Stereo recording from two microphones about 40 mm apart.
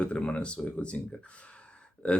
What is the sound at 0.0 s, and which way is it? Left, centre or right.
Speech, left.